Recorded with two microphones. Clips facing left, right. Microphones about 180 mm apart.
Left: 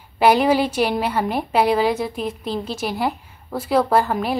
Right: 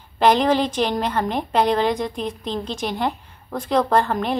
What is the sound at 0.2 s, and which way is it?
A woman's voice, 10° left (ahead or behind).